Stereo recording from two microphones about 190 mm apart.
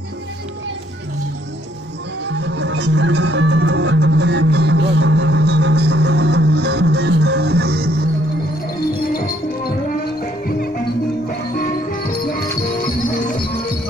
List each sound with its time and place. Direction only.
2.2 s music: 65° right (ahead or behind)
9.1 s music: 50° left (ahead or behind)
11.2 s music: 50° left (ahead or behind)